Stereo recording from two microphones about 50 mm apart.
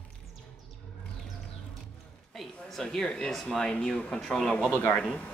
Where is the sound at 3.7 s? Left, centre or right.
Centre.